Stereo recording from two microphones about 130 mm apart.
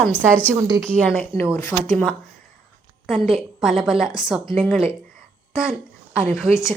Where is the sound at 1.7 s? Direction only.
5° left (ahead or behind).